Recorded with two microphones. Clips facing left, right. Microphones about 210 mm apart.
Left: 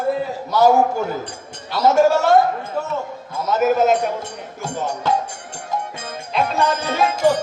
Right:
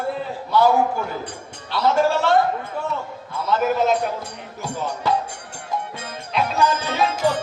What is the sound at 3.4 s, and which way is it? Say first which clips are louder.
Music: left 3 dB; 45° left (ahead or behind).